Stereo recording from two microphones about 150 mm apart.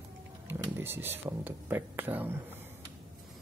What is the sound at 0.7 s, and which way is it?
Speech, 15° right (ahead or behind).